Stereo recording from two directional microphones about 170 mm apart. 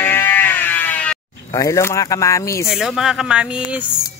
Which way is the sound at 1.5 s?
20° left (ahead or behind).